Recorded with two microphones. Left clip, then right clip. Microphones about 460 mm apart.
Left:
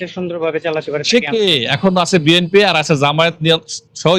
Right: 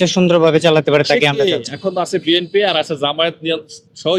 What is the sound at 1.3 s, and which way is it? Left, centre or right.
Speech, left.